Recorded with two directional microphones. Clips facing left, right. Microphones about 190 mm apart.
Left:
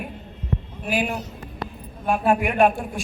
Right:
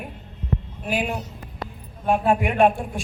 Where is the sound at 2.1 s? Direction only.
25° right (ahead or behind).